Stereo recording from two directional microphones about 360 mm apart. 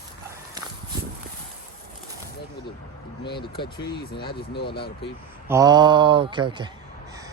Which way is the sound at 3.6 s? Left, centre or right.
Centre.